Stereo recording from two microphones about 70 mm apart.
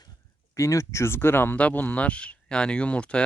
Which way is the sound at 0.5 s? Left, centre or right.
Left.